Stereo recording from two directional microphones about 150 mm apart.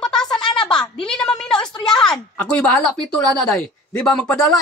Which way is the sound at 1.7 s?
30° left (ahead or behind).